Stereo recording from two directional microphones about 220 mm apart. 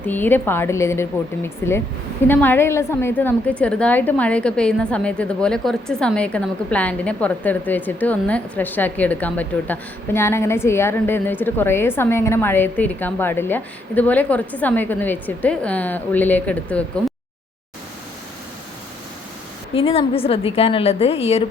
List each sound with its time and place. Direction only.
0.0 s a woman's voice: 10° left (ahead or behind)
19.7 s a woman's voice: 25° left (ahead or behind)